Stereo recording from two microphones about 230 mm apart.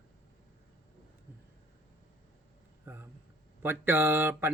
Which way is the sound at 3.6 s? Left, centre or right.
Centre.